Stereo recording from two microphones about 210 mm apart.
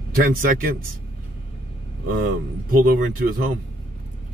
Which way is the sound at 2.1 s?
40° right (ahead or behind).